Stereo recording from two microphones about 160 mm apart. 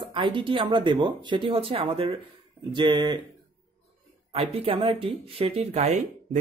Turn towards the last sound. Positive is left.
turn(degrees=-45)  # may be behind; listen again after turning